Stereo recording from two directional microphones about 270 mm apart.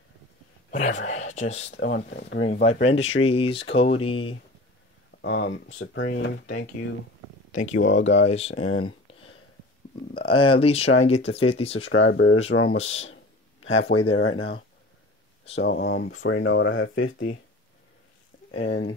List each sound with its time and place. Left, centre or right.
0.7 s speech: left
1.8 s speech: left
2.6 s speech: left
5.2 s speech: left
7.5 s speech: left
7.8 s speech: left
8.3 s speech: left
10.9 s speech: left
11.3 s speech: left
11.8 s speech: left
15.6 s speech: left
18.5 s speech: left